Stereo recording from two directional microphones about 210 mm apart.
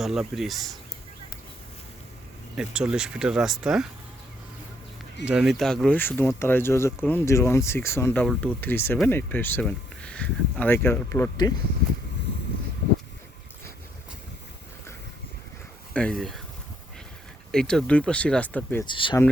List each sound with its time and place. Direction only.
0.0 s speech: centre (ahead or behind)
2.6 s speech: 5° right (ahead or behind)
5.2 s speech: 5° right (ahead or behind); by 11.5 s 15° left (ahead or behind)
15.9 s speech: 5° left (ahead or behind)
17.5 s speech: 5° left (ahead or behind)
18.9 s speech: 25° left (ahead or behind)